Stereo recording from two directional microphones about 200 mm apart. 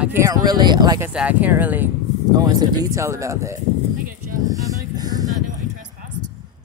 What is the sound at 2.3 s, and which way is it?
Speech, 20° right (ahead or behind).